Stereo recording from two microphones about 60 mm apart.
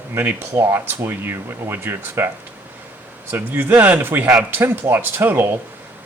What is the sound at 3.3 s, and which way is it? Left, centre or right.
Speech, right.